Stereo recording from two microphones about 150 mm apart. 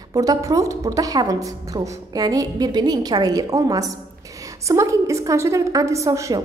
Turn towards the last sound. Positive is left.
turn(degrees=-20)  # may be behind; listen again after turning